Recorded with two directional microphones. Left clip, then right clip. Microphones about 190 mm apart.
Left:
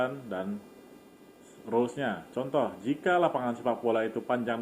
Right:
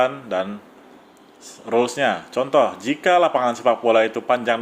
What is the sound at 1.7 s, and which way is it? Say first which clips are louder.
Speech: right 10 dB; 30° right (ahead or behind).